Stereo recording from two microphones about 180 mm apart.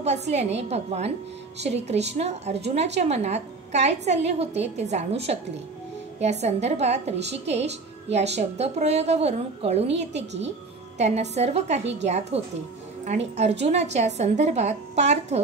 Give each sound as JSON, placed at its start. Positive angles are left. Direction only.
{"t": 0.0, "sound": "a woman's voice", "side_deg": -35}
{"t": 10.1, "sound": "speech", "side_deg": -75}
{"t": 11.0, "sound": "a woman's voice", "side_deg": -40}
{"t": 13.4, "sound": "a woman's voice", "side_deg": -35}